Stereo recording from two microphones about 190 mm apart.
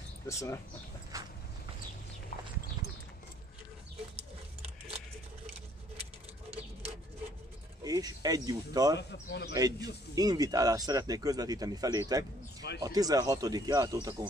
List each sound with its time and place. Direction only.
0.3 s speech: 15° left (ahead or behind)
1.1 s a sound: 15° right (ahead or behind)
7.8 s speech: 20° right (ahead or behind)
9.1 s speech: 60° left (ahead or behind)
9.5 s speech: 20° right (ahead or behind)